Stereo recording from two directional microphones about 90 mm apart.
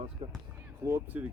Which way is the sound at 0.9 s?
25° right (ahead or behind).